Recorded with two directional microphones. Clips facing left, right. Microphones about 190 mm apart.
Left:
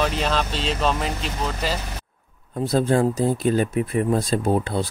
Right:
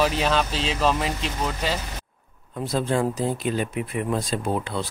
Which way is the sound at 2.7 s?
40° left (ahead or behind).